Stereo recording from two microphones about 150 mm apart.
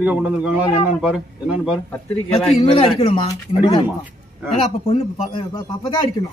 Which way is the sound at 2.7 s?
40° left (ahead or behind).